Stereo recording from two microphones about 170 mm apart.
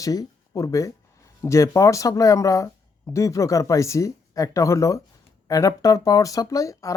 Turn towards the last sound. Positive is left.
turn(degrees=20)  # may be behind; listen again after turning